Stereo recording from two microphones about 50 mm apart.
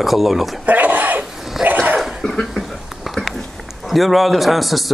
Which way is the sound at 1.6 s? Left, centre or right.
Right.